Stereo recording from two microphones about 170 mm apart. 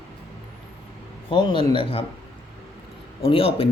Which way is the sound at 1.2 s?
30° left (ahead or behind).